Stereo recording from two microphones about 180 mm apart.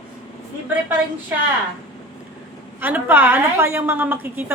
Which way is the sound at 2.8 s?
10° right (ahead or behind).